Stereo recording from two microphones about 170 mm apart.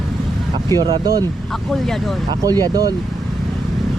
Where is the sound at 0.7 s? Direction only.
25° right (ahead or behind).